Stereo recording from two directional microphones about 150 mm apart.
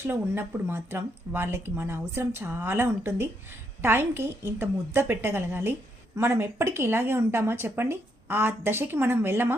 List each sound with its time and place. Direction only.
0.0 s speech: 15° right (ahead or behind)